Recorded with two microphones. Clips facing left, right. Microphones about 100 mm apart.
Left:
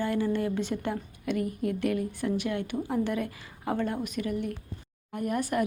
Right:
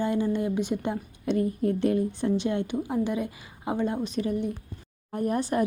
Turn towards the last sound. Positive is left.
turn(degrees=-30)  # may be behind; listen again after turning